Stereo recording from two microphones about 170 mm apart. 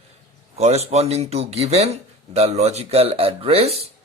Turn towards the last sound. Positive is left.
turn(degrees=-35)  # may be behind; listen again after turning